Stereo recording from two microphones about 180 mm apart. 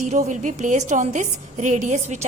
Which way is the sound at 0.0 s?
40° right (ahead or behind).